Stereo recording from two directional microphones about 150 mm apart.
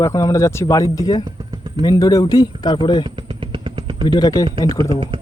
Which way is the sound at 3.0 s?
35° right (ahead or behind).